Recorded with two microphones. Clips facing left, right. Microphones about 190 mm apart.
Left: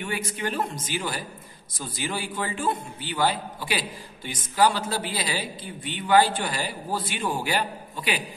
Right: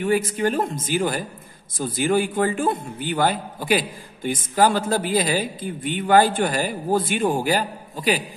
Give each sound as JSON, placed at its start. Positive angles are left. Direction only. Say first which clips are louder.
{"t": 0.0, "sound": "a man's voice", "louder": "right 9 dB", "side_deg": -45}